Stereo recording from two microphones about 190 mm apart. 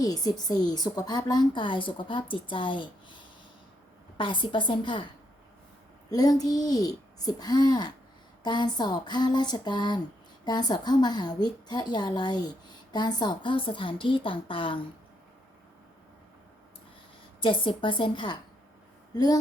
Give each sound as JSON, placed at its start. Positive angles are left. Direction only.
{"t": 0.0, "sound": "a woman's voice", "side_deg": 20}
{"t": 4.2, "sound": "a woman's voice", "side_deg": 25}
{"t": 6.1, "sound": "a woman's voice", "side_deg": 20}
{"t": 17.4, "sound": "a woman's voice", "side_deg": 25}